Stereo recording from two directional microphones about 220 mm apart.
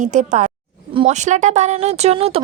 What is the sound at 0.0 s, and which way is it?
Speech, 35° right (ahead or behind).